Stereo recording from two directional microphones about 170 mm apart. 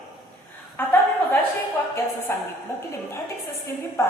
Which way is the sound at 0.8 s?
10° left (ahead or behind).